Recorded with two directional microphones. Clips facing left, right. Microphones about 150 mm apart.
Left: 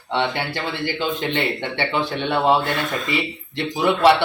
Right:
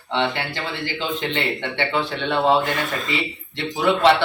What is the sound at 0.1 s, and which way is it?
Speech, 15° left (ahead or behind).